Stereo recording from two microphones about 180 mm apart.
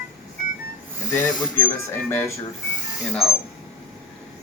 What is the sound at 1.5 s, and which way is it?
Speech, 10° left (ahead or behind).